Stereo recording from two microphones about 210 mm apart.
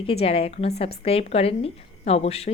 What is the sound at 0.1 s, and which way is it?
A woman's voice, 30° left (ahead or behind).